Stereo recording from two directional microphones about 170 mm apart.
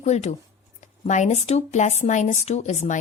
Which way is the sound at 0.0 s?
40° left (ahead or behind).